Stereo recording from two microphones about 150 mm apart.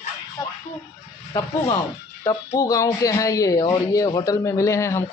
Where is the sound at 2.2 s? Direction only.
20° left (ahead or behind).